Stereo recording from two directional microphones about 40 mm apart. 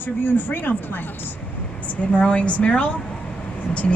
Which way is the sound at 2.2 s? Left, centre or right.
Left.